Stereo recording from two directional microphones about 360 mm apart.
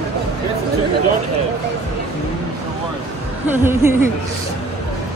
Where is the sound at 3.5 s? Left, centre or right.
Centre.